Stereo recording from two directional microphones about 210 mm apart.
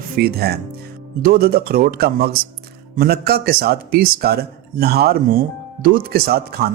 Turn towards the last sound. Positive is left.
turn(degrees=-45)  # may be behind; listen again after turning